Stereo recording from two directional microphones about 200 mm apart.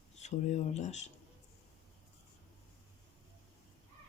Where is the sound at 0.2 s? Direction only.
35° left (ahead or behind).